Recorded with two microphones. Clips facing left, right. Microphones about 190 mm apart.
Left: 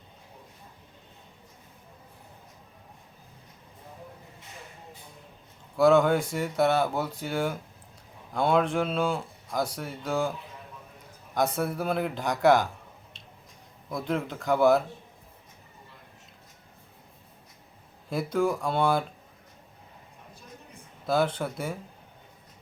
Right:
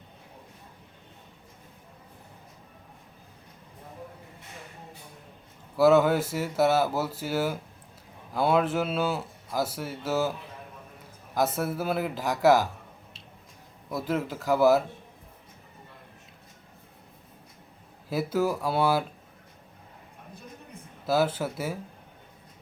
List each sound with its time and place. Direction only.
5.7 s a man's voice: 5° right (ahead or behind)
11.3 s a man's voice: 5° right (ahead or behind)
13.9 s a man's voice: 5° right (ahead or behind)
18.1 s a man's voice: 5° right (ahead or behind)
21.1 s a man's voice: 5° right (ahead or behind)